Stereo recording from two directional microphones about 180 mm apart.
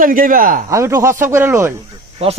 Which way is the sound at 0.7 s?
15° right (ahead or behind).